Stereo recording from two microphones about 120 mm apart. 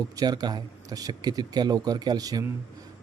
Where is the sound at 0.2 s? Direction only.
35° right (ahead or behind).